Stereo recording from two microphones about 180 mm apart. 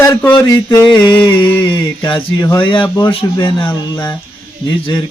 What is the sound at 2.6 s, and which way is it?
Speech, 25° left (ahead or behind).